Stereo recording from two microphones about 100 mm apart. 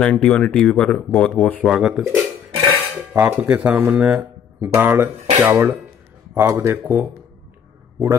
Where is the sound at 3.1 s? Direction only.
15° right (ahead or behind).